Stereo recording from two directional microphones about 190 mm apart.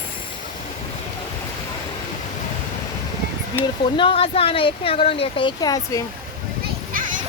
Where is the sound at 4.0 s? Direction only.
30° left (ahead or behind).